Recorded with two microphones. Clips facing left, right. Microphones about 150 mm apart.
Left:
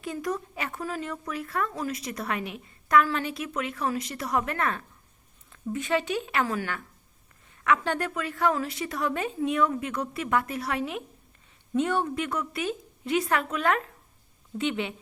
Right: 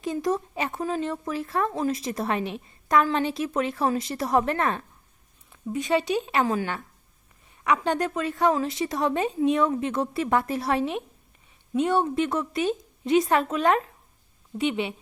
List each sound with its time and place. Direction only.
0.0 s speech: 25° right (ahead or behind)
5.5 s speech: 15° right (ahead or behind)